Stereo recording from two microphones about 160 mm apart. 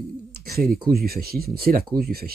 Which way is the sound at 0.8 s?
70° right (ahead or behind).